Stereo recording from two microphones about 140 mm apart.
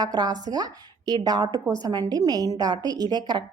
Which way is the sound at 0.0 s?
30° right (ahead or behind).